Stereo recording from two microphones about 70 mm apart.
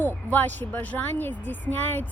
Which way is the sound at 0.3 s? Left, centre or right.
Left.